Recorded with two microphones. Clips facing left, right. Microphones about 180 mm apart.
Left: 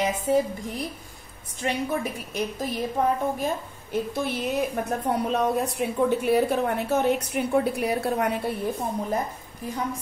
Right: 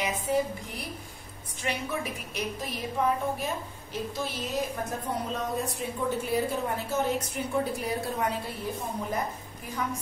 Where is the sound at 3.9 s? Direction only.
60° left (ahead or behind).